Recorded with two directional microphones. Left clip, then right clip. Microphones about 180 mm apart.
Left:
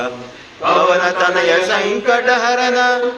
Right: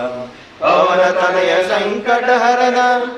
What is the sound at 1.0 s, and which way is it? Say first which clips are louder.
Mantra: right 1 dB; 10° left (ahead or behind).